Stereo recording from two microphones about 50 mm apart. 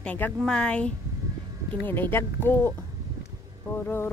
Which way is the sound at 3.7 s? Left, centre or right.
Left.